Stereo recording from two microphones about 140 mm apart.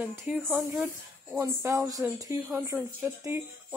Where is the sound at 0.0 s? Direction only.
20° right (ahead or behind).